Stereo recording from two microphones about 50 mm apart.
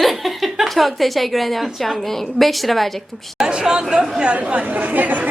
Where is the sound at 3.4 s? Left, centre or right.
Centre.